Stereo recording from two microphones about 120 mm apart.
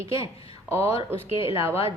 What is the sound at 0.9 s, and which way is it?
Speech, 50° left (ahead or behind).